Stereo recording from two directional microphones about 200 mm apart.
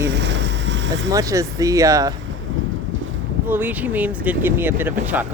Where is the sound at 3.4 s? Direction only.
10° right (ahead or behind).